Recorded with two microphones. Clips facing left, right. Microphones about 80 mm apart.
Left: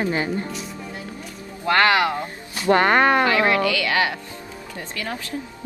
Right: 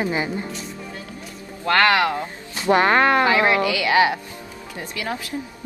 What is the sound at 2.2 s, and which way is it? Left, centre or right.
Speech, centre.